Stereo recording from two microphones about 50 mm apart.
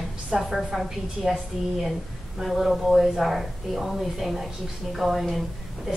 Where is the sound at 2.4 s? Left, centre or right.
Centre.